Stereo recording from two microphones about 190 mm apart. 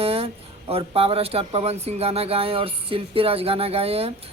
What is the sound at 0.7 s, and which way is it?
Speech, 30° right (ahead or behind).